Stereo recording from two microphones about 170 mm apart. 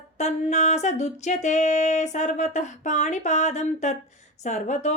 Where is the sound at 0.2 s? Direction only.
45° left (ahead or behind).